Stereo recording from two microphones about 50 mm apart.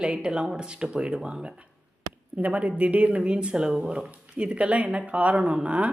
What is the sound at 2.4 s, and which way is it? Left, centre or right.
Speech, right.